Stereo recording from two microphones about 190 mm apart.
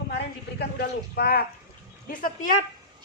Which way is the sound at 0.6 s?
55° left (ahead or behind).